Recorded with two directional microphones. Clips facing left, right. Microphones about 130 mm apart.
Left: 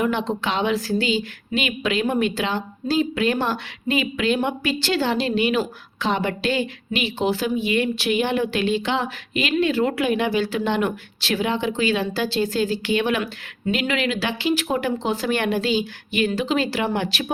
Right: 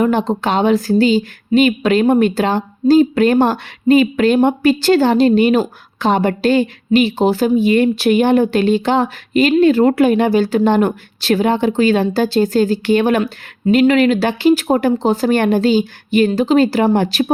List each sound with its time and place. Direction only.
0.0 s a woman's voice: 40° right (ahead or behind)